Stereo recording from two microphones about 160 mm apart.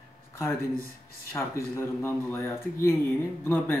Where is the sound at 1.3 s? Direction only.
15° left (ahead or behind).